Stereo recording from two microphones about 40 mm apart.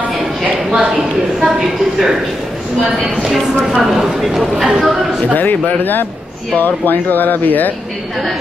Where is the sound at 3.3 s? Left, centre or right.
Centre.